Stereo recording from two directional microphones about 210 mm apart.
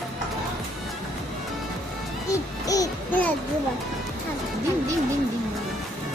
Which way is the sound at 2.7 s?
10° left (ahead or behind).